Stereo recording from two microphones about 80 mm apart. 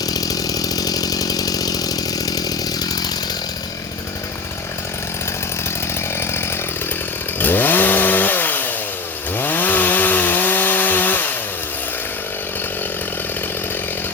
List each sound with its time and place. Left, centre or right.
0.0 s chainsaw: left
6.1 s chainsaw: left